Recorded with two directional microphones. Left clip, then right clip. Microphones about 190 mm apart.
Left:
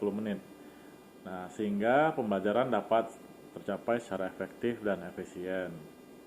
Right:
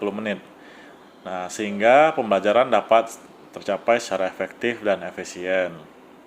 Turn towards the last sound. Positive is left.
turn(degrees=-30)  # may be behind; listen again after turning